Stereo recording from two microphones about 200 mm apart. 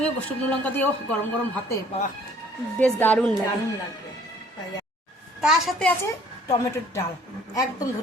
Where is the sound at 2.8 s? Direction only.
5° left (ahead or behind).